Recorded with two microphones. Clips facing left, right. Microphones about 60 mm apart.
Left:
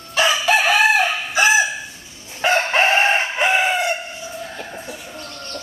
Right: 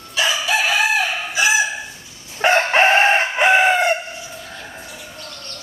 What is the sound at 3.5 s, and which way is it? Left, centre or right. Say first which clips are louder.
Chicken: right 5 dB; right.